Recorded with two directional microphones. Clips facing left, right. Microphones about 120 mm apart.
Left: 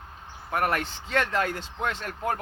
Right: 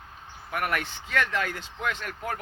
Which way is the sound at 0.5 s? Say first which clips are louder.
Left 3 dB; 35° left (ahead or behind).